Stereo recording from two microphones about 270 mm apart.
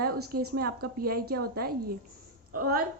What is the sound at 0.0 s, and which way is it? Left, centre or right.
A woman's voice, right.